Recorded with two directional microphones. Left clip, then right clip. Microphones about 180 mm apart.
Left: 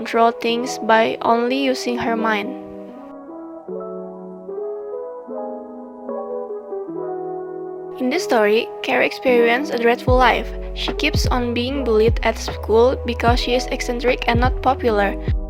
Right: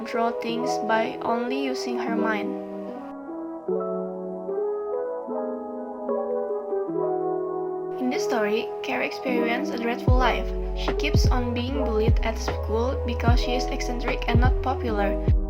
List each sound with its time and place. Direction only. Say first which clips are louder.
0.1 s speech: left 9 dB; 50° left (ahead or behind)
7.9 s speech: left 8 dB; 60° left (ahead or behind)